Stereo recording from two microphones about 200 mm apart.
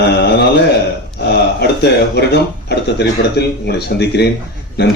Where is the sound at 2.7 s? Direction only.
55° left (ahead or behind).